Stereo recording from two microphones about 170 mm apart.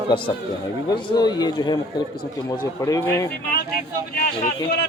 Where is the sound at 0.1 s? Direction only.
25° left (ahead or behind).